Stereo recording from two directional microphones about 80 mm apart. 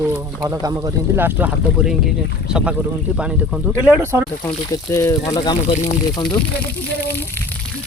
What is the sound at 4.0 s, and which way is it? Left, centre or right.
Speech, right.